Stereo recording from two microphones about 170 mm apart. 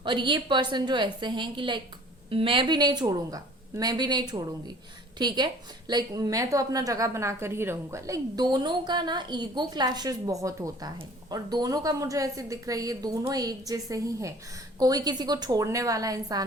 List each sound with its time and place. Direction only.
0.0 s a woman's voice: 30° right (ahead or behind)